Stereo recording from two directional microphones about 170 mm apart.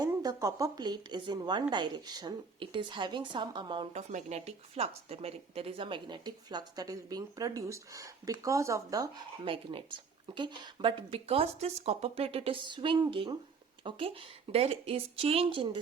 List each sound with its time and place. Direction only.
0.2 s speech: 20° right (ahead or behind)
3.9 s speech: 40° right (ahead or behind); by 9.0 s 20° right (ahead or behind)
9.4 s a woman's voice: 30° right (ahead or behind)